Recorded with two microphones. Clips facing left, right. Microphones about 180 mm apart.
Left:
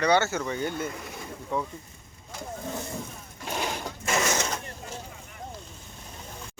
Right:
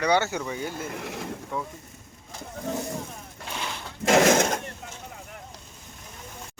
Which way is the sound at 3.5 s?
45° left (ahead or behind).